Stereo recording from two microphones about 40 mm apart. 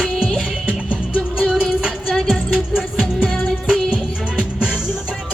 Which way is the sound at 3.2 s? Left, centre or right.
Centre.